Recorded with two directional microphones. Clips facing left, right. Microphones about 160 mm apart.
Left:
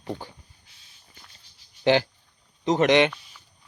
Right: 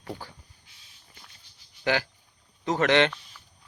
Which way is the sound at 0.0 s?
20° left (ahead or behind).